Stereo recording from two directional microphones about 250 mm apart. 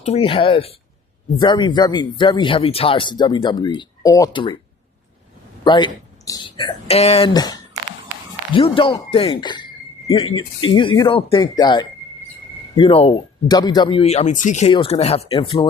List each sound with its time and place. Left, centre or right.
0.0 s speech: left
5.6 s speech: centre